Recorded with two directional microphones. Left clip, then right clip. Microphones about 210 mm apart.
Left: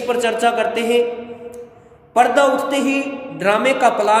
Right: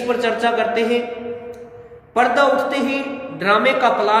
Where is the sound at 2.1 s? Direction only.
45° left (ahead or behind).